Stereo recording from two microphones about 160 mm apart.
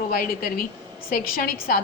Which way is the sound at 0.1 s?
65° left (ahead or behind).